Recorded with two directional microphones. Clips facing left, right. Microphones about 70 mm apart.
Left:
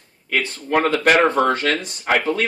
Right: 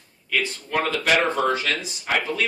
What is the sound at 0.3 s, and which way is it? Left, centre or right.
Speech, left.